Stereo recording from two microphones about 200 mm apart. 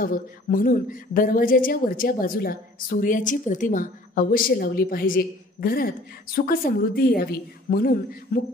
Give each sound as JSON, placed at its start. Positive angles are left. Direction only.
{"t": 0.0, "sound": "a woman's voice", "side_deg": 45}